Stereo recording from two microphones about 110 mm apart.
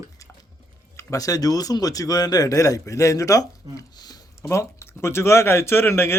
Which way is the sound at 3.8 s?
35° left (ahead or behind).